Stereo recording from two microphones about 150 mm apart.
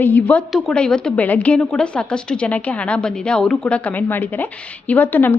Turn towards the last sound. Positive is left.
turn(degrees=15)  # may be behind; listen again after turning